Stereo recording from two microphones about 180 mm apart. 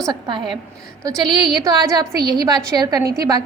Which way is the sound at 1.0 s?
25° right (ahead or behind).